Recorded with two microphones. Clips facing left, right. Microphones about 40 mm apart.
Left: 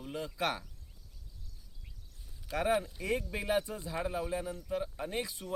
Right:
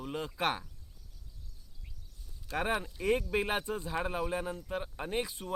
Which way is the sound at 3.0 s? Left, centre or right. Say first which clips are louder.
Right 5 dB; right.